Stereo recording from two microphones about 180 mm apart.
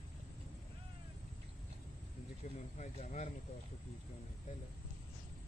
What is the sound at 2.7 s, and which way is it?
Speech, 40° left (ahead or behind).